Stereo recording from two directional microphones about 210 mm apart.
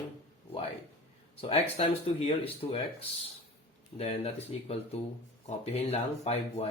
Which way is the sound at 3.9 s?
30° left (ahead or behind).